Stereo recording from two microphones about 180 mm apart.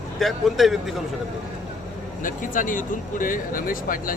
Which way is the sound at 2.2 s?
50° left (ahead or behind).